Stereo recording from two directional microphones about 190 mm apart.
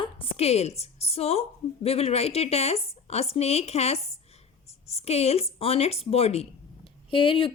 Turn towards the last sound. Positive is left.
turn(degrees=25)  # may be behind; listen again after turning